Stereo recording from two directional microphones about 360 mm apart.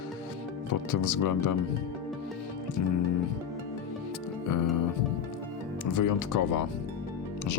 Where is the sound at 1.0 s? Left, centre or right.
Left.